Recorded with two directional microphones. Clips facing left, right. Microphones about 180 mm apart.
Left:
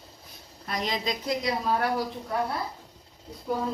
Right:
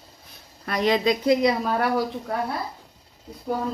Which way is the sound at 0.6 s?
65° right (ahead or behind).